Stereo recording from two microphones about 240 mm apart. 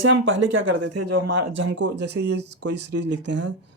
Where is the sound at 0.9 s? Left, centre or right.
Right.